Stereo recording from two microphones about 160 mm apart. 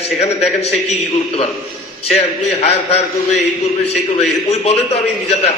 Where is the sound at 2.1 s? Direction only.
40° left (ahead or behind).